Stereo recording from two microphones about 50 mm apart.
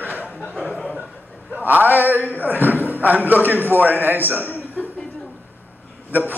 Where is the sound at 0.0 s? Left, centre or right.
Right.